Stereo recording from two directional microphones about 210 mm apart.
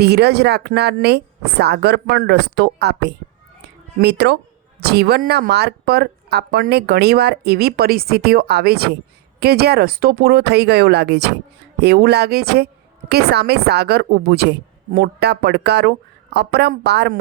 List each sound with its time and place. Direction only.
0.0 s speech: 50° right (ahead or behind)